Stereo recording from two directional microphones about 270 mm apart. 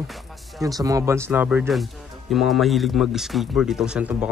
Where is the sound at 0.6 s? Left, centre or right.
Centre.